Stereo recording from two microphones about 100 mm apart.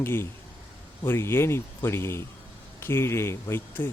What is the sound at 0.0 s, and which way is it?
Speech, 25° left (ahead or behind).